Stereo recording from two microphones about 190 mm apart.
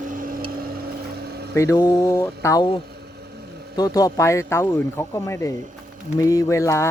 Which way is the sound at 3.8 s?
20° left (ahead or behind).